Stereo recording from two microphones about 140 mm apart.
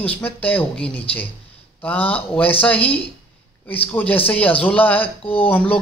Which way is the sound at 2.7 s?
45° left (ahead or behind).